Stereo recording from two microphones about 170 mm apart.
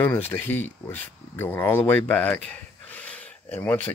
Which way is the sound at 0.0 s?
10° left (ahead or behind).